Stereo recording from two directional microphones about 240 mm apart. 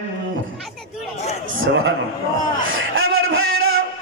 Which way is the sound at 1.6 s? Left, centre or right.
Right.